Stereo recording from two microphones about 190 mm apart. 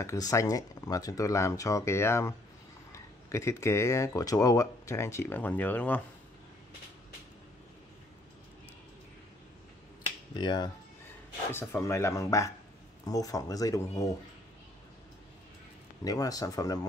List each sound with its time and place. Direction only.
0.0 s speech: 15° left (ahead or behind)
10.3 s speech: 20° left (ahead or behind)
16.0 s speech: 20° left (ahead or behind)